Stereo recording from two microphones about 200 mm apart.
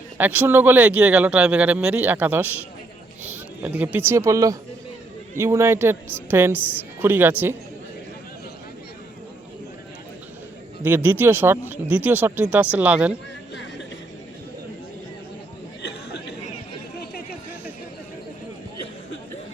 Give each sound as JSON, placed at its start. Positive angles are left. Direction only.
{"t": 0.2, "sound": "speech", "side_deg": -10}
{"t": 10.8, "sound": "speech", "side_deg": -10}
{"t": 15.8, "sound": "chatter", "side_deg": 60}